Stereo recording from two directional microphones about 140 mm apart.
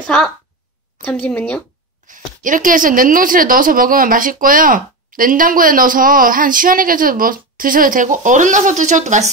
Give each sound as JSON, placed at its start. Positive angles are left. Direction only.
{"t": 0.0, "sound": "a woman's voice", "side_deg": 5}
{"t": 2.0, "sound": "speech", "side_deg": -70}